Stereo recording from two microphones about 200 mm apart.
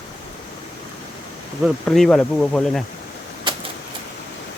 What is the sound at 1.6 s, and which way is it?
Speech, centre (ahead or behind).